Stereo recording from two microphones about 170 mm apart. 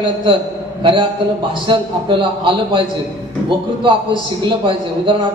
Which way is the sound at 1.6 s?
30° right (ahead or behind).